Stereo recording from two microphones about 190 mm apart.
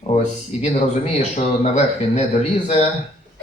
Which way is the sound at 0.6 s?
35° left (ahead or behind).